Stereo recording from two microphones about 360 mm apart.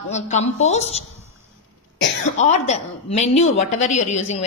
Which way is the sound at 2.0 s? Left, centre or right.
Centre.